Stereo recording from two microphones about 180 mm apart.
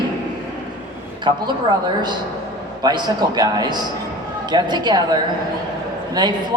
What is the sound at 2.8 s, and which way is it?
A woman's voice, 25° right (ahead or behind).